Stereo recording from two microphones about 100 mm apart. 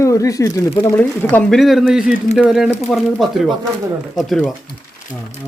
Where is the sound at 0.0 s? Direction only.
30° left (ahead or behind).